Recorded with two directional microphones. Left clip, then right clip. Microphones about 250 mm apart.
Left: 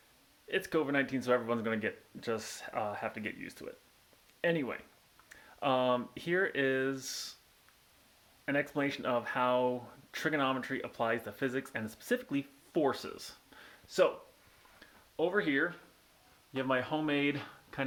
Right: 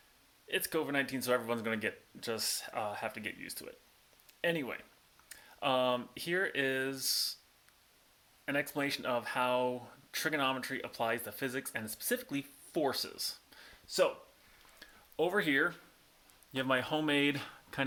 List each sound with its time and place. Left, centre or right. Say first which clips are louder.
0.4 s speech: left 2 dB; centre
8.4 s speech: left 1 dB; centre
14.8 s a sound: even; right
16.5 s speech: even; right